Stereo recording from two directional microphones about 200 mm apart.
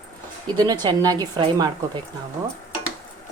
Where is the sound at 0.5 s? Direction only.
20° right (ahead or behind).